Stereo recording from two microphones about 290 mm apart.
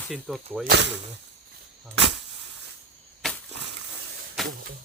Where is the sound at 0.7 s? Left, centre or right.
Right.